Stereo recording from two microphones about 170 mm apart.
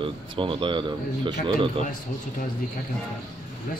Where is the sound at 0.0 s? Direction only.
30° right (ahead or behind).